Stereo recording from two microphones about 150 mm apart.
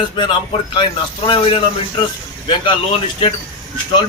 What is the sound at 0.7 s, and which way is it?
Speech, 30° left (ahead or behind).